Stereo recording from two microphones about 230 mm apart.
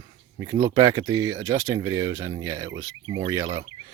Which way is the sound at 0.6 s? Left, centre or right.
Centre.